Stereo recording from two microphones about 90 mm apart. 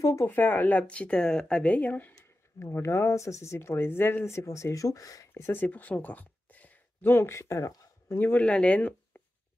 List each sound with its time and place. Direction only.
0.0 s a sound: 35° left (ahead or behind)
0.3 s speech: 20° left (ahead or behind); by 5.3 s 40° left (ahead or behind)
5.3 s speech: 25° left (ahead or behind)
8.2 s speech: 20° left (ahead or behind)